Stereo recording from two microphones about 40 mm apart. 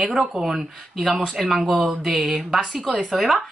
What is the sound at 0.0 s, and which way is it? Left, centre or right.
Speech, centre.